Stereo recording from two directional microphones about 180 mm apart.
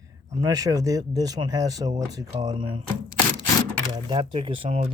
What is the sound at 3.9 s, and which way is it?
Speech, 30° right (ahead or behind).